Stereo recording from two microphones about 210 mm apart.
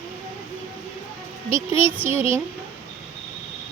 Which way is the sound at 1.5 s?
10° right (ahead or behind).